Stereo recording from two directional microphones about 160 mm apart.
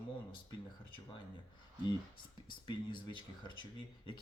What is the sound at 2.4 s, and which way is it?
Speech, 30° left (ahead or behind).